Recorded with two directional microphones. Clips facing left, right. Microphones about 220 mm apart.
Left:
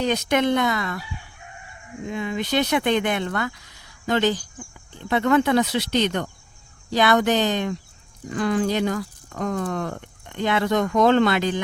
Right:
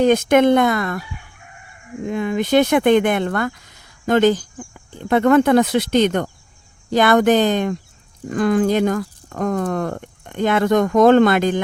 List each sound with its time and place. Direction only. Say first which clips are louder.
0.0 s speech: right 8 dB; 50° right (ahead or behind)
2.0 s speech: right 6 dB; 50° right (ahead or behind)